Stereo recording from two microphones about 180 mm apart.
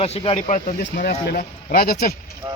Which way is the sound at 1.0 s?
50° left (ahead or behind).